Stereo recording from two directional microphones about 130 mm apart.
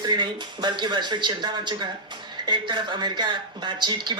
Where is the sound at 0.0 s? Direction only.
35° right (ahead or behind).